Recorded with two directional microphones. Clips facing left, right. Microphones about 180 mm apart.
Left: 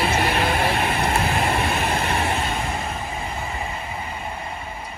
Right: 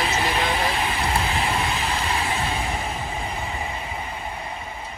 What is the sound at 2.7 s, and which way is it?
Vehicle, centre (ahead or behind).